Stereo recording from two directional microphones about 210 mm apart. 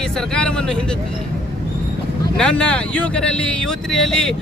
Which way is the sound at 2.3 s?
5° left (ahead or behind).